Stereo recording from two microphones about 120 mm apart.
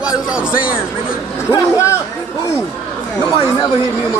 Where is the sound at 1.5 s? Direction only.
25° left (ahead or behind).